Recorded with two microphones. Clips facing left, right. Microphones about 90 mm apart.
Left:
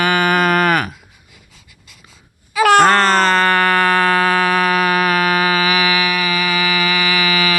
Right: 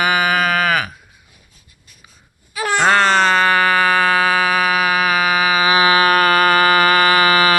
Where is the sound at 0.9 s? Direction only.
90° left.